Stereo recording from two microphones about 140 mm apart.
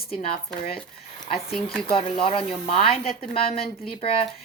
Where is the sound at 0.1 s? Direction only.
45° left (ahead or behind).